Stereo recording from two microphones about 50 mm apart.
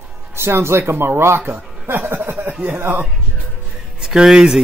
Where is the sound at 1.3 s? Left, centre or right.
Right.